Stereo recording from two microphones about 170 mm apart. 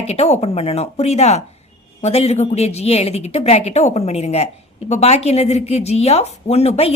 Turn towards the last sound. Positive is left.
turn(degrees=35)  # may be behind; listen again after turning